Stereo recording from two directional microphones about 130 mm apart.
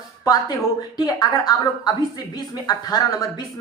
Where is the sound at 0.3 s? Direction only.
30° left (ahead or behind).